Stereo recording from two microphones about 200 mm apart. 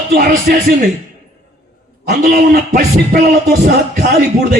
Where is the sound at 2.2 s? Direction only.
50° right (ahead or behind).